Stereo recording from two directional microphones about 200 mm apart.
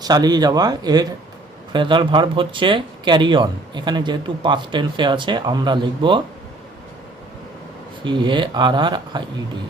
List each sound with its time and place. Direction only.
0.0 s speech: 20° right (ahead or behind)
8.0 s speech: 25° right (ahead or behind)